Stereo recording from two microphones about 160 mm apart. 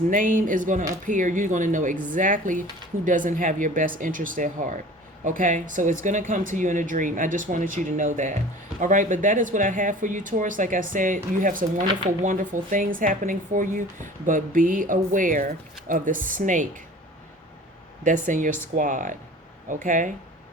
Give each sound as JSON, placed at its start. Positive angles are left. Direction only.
{"t": 0.1, "sound": "speech", "side_deg": -60}
{"t": 18.0, "sound": "speech", "side_deg": -55}